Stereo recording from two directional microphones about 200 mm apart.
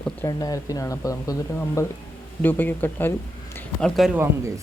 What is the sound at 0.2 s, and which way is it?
Speech, 20° left (ahead or behind).